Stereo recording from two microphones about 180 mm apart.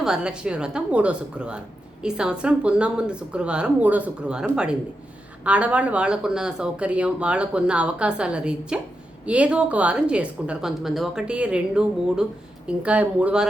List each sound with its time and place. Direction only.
0.0 s speech: 5° right (ahead or behind)